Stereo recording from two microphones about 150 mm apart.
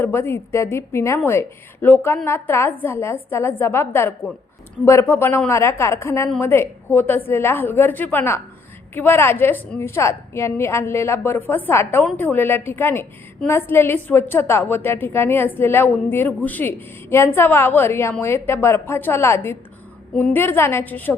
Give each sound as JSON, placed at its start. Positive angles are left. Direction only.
{"t": 0.0, "sound": "a woman's voice", "side_deg": 15}